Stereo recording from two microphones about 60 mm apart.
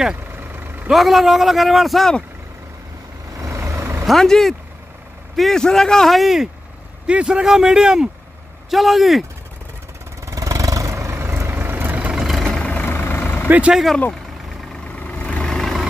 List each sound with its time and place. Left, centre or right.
0.4 s vehicle: right
0.8 s speech: centre
3.3 s vehicle: right
4.0 s speech: centre
7.1 s speech: centre
10.2 s vehicle: right
11.9 s vehicle: right
12.2 s vehicle: centre
12.6 s vehicle: left
13.5 s speech: right
15.0 s vehicle: left
15.4 s vehicle: centre